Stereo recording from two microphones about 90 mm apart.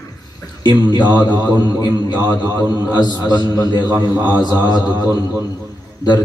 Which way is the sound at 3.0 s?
50° left (ahead or behind).